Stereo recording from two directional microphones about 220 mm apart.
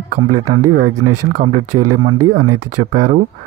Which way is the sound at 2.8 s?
35° right (ahead or behind).